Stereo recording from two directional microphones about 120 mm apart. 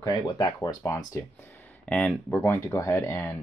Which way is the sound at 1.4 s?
15° left (ahead or behind).